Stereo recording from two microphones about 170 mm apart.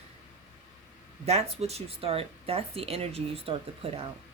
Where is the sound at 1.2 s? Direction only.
40° right (ahead or behind).